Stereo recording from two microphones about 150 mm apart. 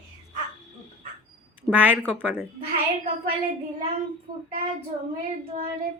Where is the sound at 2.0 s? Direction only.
10° left (ahead or behind).